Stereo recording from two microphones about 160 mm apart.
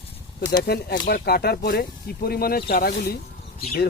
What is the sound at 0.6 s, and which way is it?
Speech, 75° left (ahead or behind).